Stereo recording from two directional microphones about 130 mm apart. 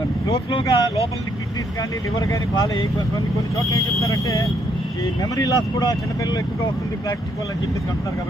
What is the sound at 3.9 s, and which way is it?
Speech, 25° left (ahead or behind).